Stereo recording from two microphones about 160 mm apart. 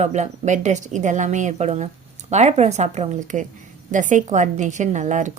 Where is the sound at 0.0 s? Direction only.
45° right (ahead or behind).